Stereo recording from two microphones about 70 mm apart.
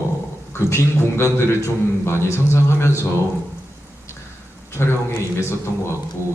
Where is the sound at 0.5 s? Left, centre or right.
Left.